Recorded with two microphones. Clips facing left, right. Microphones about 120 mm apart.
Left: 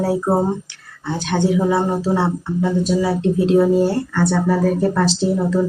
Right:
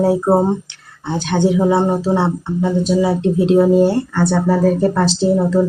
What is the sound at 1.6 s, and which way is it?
Speech, 25° right (ahead or behind).